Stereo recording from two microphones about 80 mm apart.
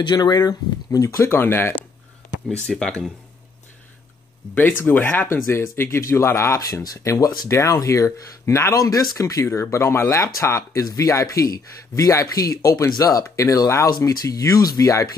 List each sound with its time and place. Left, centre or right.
0.0 s speech: left
2.5 s speech: centre
4.6 s speech: left
7.4 s speech: left
13.2 s speech: left